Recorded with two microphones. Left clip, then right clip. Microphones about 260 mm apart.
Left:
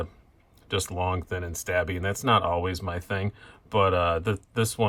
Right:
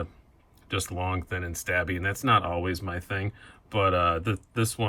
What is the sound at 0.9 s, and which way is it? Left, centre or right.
Speech, centre.